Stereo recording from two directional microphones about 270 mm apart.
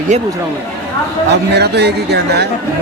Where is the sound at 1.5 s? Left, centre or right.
Right.